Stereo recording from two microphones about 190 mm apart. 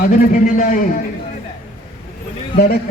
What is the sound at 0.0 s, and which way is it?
Speech, 50° left (ahead or behind).